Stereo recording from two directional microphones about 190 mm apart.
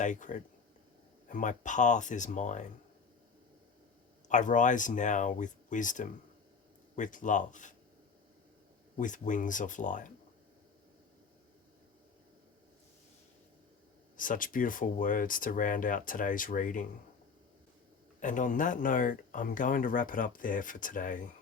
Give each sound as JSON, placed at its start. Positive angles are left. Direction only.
{"t": 0.0, "sound": "speech", "side_deg": 40}
{"t": 4.3, "sound": "speech", "side_deg": 40}
{"t": 9.0, "sound": "speech", "side_deg": 40}
{"t": 14.2, "sound": "speech", "side_deg": 45}
{"t": 18.2, "sound": "speech", "side_deg": 40}